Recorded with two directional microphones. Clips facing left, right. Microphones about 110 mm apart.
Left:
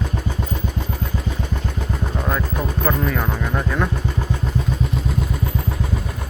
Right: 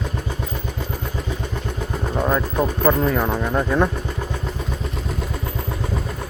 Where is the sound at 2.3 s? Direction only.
15° right (ahead or behind).